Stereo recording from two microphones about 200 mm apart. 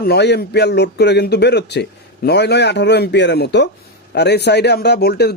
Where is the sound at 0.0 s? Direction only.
55° left (ahead or behind).